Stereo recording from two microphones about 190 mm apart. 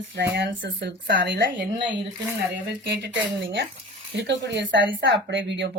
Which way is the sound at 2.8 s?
65° right (ahead or behind).